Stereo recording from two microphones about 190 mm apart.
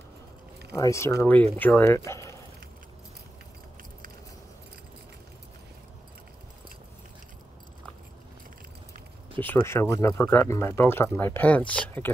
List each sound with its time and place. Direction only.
0.7 s speech: 15° left (ahead or behind)
9.4 s speech: 10° left (ahead or behind)